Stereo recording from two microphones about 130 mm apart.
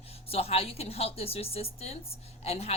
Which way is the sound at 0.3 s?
50° left (ahead or behind).